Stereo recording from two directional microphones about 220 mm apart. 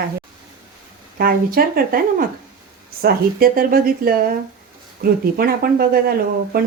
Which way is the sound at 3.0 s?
40° right (ahead or behind).